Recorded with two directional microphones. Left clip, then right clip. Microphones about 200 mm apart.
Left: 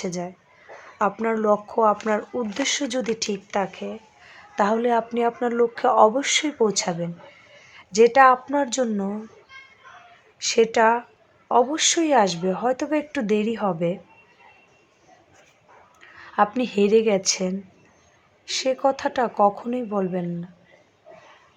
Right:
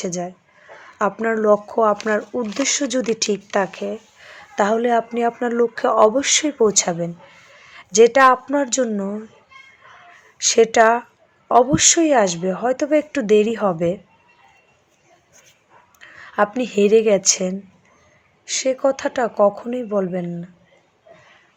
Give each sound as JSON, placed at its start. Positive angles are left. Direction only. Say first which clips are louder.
{"t": 0.0, "sound": "a woman's voice", "louder": "right 4 dB", "side_deg": -10}
{"t": 10.3, "sound": "a woman's voice", "louder": "right 5 dB", "side_deg": -20}
{"t": 16.0, "sound": "a woman's voice", "louder": "right 2 dB", "side_deg": -15}